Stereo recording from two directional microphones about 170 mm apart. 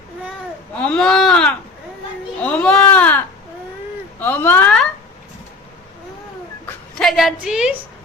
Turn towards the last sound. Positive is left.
turn(degrees=-5)  # may be behind; listen again after turning